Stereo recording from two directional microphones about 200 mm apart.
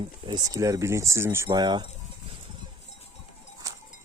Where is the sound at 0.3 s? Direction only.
20° right (ahead or behind).